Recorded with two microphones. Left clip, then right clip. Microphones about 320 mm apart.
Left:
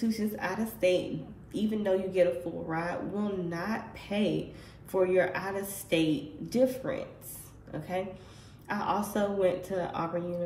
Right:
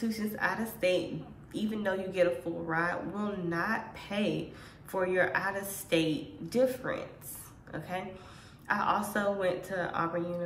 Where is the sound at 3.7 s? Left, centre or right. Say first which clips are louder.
Right 1 dB; right.